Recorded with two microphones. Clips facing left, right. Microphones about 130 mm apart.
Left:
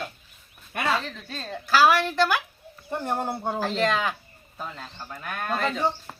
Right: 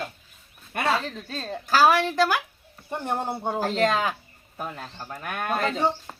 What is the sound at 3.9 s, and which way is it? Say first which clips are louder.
Speech: right 1 dB; 40° right (ahead or behind).